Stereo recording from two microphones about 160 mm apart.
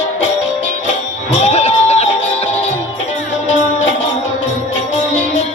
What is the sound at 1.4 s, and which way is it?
Crowd, 40° left (ahead or behind).